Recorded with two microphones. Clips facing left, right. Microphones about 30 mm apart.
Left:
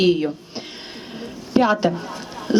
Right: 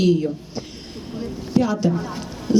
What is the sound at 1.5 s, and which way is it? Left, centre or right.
Speech, left.